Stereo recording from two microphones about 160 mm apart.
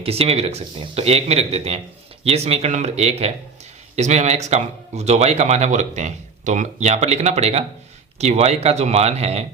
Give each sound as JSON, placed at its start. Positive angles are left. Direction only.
{"t": 0.0, "sound": "a man's voice", "side_deg": -40}